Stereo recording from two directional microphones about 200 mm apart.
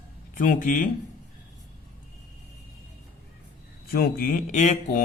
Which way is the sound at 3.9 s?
50° left (ahead or behind).